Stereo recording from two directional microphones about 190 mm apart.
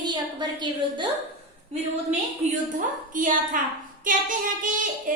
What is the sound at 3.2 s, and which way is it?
Speech, 45° right (ahead or behind).